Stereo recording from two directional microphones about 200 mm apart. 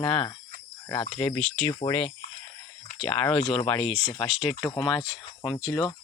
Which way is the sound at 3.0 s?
5° left (ahead or behind).